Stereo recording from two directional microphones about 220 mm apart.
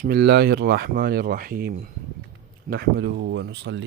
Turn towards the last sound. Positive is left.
turn(degrees=-55)  # may be behind; listen again after turning